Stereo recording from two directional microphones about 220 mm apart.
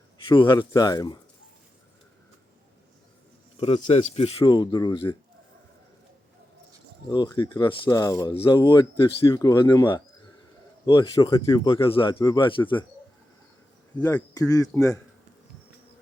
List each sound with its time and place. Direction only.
0.3 s speech: 20° left (ahead or behind)
3.6 s speech: 30° left (ahead or behind)
7.1 s speech: 20° left (ahead or behind)
13.9 s speech: 5° left (ahead or behind)